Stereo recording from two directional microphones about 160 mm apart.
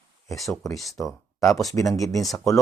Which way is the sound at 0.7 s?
Centre (ahead or behind).